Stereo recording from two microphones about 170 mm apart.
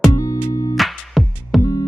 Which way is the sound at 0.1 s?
20° left (ahead or behind).